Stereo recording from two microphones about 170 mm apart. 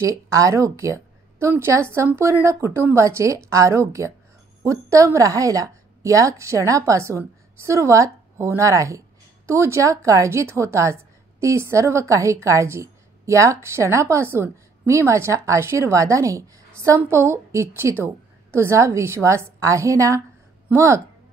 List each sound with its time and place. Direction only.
0.0 s a woman's voice: 20° right (ahead or behind)